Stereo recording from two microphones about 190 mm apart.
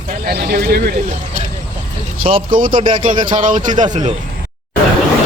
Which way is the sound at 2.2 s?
30° right (ahead or behind).